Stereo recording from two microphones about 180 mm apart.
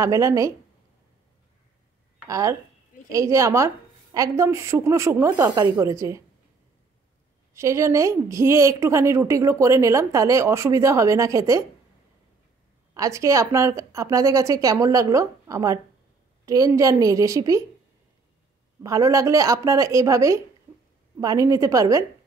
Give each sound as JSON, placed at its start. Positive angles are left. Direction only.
{"t": 0.0, "sound": "a woman's voice", "side_deg": -15}
{"t": 2.2, "sound": "a woman's voice", "side_deg": -20}
{"t": 7.5, "sound": "a woman's voice", "side_deg": -15}
{"t": 12.9, "sound": "a woman's voice", "side_deg": -20}
{"t": 18.8, "sound": "a woman's voice", "side_deg": -20}